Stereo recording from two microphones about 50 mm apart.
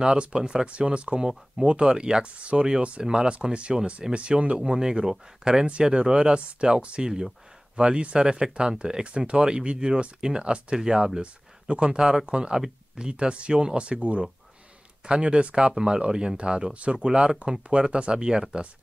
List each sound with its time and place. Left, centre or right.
0.0 s speech: centre